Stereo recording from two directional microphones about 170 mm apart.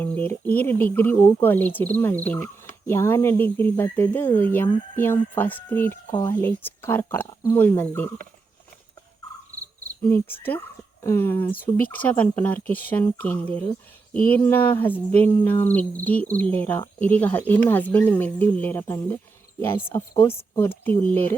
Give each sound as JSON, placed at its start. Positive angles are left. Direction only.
{"t": 0.0, "sound": "speech", "side_deg": 10}
{"t": 10.1, "sound": "speech", "side_deg": 10}